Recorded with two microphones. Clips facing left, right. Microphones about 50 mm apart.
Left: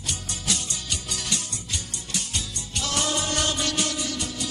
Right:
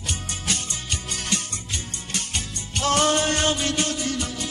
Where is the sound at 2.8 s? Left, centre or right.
Right.